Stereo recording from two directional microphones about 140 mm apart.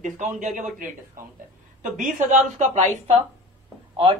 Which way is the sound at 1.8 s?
70° right (ahead or behind).